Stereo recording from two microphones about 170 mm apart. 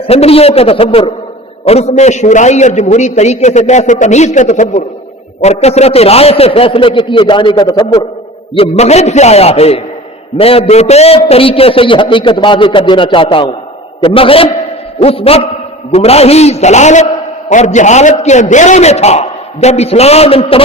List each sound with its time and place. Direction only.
0.1 s a man's voice: 35° left (ahead or behind)
8.5 s a man's voice: 35° left (ahead or behind)